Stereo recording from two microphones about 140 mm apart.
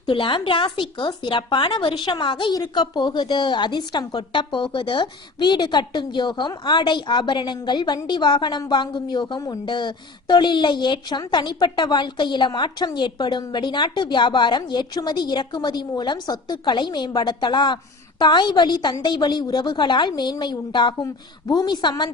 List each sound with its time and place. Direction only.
0.0 s speech: 35° left (ahead or behind)